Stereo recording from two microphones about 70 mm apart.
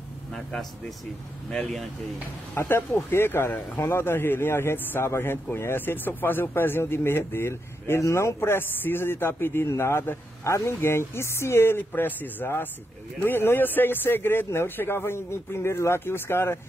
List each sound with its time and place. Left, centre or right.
0.3 s speech: centre
2.5 s a man's voice: left